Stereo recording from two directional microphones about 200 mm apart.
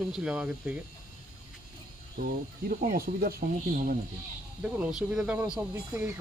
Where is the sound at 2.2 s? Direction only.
45° right (ahead or behind).